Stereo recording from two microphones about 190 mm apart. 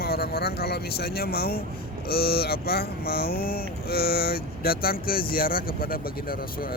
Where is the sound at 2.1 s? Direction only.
55° left (ahead or behind).